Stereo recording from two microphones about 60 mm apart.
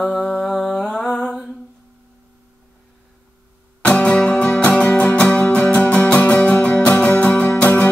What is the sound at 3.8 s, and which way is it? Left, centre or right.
Music, centre.